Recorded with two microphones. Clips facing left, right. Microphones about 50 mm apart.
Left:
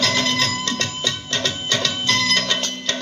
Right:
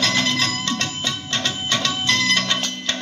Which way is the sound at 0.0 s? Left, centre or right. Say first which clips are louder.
Even; right.